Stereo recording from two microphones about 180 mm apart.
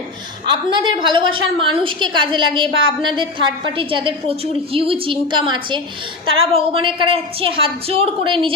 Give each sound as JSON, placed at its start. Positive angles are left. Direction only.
{"t": 0.4, "sound": "a woman's voice", "side_deg": -25}